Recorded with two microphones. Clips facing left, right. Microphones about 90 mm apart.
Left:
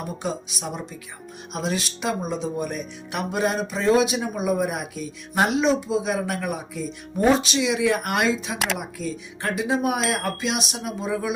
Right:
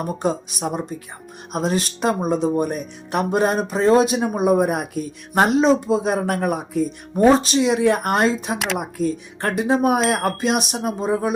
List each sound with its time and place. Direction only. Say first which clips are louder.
0.2 s speech: right 7 dB; 45° right (ahead or behind)
8.5 s speech: right 3 dB; centre (ahead or behind)
8.8 s speech: right 7 dB; 45° right (ahead or behind)